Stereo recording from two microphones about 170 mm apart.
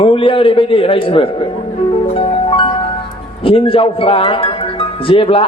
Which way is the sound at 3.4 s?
30° left (ahead or behind).